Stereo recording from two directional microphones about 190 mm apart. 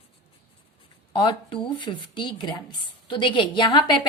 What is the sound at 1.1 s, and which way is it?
A woman's voice, 25° left (ahead or behind).